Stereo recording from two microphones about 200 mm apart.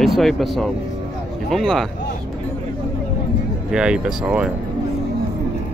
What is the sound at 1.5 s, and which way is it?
Speech, centre (ahead or behind).